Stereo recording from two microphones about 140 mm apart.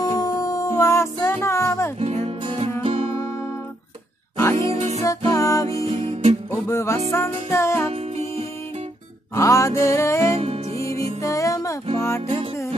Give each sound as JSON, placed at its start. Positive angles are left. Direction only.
{"t": 0.0, "sound": "music", "side_deg": 25}
{"t": 2.0, "sound": "music", "side_deg": -45}
{"t": 4.7, "sound": "music", "side_deg": -50}
{"t": 5.0, "sound": "music", "side_deg": 25}
{"t": 5.9, "sound": "music", "side_deg": -40}
{"t": 6.5, "sound": "music", "side_deg": 20}
{"t": 7.9, "sound": "music", "side_deg": -45}
{"t": 9.3, "sound": "music", "side_deg": 20}
{"t": 10.3, "sound": "music", "side_deg": -45}
{"t": 11.2, "sound": "music", "side_deg": 25}